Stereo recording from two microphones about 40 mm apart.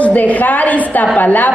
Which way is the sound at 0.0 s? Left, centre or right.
Left.